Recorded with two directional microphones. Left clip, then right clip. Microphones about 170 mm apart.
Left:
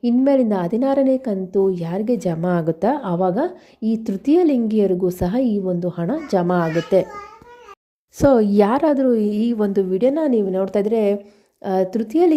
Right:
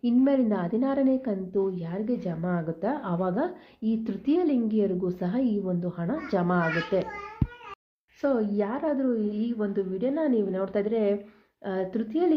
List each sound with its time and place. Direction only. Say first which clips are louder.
0.0 s a woman's voice: left 7 dB; 40° left (ahead or behind)
8.2 s a woman's voice: left 12 dB; 55° left (ahead or behind)